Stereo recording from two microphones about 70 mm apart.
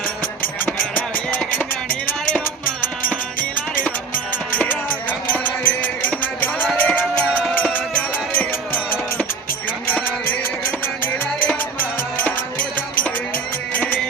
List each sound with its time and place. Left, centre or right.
0.6 s music: left
4.5 s music: left